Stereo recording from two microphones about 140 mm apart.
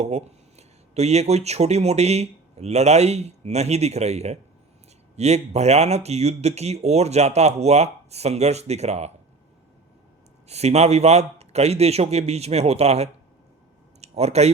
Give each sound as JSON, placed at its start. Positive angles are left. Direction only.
{"t": 0.0, "sound": "speech", "side_deg": -50}
{"t": 10.5, "sound": "speech", "side_deg": -50}